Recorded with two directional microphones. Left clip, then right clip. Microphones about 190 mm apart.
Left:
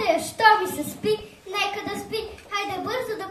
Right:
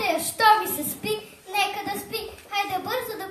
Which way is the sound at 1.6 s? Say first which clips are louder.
Right 1 dB; 35° left (ahead or behind).